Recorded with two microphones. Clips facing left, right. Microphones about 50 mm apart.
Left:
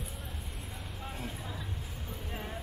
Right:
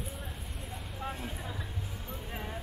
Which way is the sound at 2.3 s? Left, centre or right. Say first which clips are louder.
Right 1 dB; centre.